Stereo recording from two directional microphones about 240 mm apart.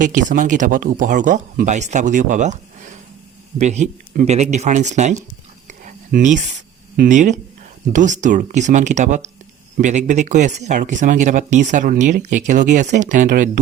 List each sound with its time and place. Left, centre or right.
0.0 s speech: right
5.8 s whispering: right
6.9 s speech: right